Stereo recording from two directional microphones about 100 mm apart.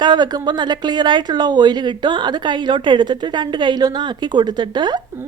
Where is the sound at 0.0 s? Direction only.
45° right (ahead or behind).